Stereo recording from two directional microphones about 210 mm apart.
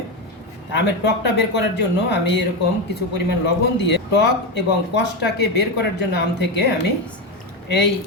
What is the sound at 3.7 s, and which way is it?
A woman's voice, 55° left (ahead or behind).